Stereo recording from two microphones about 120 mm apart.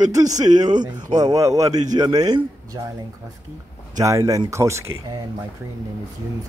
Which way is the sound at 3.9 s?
25° right (ahead or behind).